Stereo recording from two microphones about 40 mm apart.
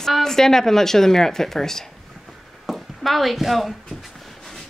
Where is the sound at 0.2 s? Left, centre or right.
Centre.